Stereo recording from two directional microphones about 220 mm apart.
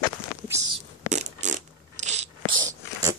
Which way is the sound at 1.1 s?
30° right (ahead or behind).